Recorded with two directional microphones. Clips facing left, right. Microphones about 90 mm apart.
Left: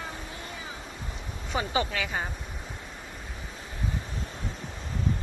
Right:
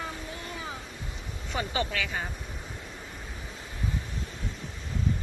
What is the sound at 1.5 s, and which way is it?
Speech, 15° left (ahead or behind).